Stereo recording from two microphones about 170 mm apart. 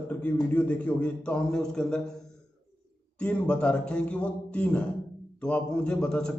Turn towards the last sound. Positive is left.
turn(degrees=5)  # may be behind; listen again after turning